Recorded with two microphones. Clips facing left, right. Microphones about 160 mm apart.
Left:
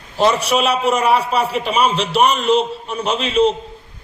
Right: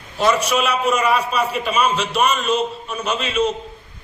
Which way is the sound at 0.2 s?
30° left (ahead or behind).